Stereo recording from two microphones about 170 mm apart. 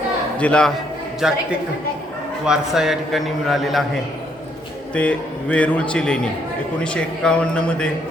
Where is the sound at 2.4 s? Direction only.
5° right (ahead or behind).